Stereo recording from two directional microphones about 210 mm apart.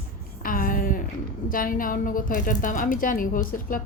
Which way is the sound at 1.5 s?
40° left (ahead or behind).